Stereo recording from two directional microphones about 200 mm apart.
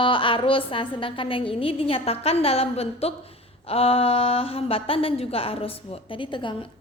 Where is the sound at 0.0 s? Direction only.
25° left (ahead or behind).